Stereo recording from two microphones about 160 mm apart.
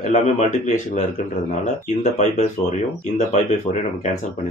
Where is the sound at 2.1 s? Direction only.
45° left (ahead or behind).